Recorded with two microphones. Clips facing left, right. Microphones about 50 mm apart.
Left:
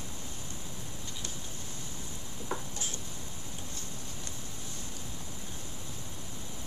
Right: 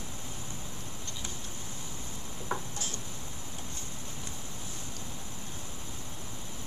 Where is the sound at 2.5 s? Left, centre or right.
Right.